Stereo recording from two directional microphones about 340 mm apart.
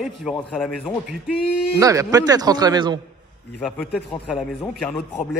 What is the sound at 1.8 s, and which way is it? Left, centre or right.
Speech, centre.